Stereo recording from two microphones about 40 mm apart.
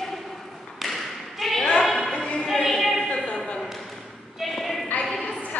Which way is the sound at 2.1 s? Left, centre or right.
Left.